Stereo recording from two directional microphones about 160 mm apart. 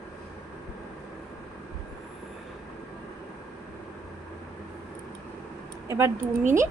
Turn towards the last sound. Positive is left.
turn(degrees=-15)  # may be behind; listen again after turning